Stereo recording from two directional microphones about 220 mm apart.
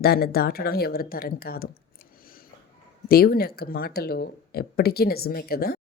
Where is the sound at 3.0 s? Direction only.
45° left (ahead or behind).